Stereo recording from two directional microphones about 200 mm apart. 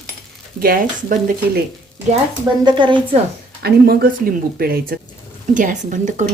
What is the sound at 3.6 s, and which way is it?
Speech, 50° right (ahead or behind).